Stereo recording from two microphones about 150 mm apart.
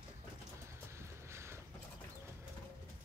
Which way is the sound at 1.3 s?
15° right (ahead or behind).